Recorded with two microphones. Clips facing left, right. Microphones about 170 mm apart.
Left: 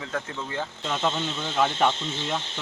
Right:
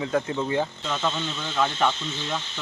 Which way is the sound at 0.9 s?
20° left (ahead or behind).